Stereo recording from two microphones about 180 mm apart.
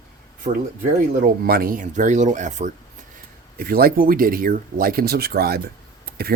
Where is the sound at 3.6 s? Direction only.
55° right (ahead or behind).